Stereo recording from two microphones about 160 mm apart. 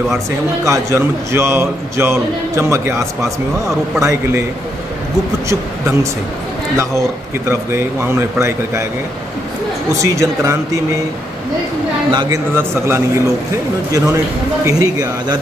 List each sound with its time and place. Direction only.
0.7 s a man's voice: 15° right (ahead or behind)
6.8 s a man's voice: 15° right (ahead or behind)
10.0 s a man's voice: 20° right (ahead or behind)
12.1 s a man's voice: 25° right (ahead or behind)
12.5 s a man's voice: 15° right (ahead or behind)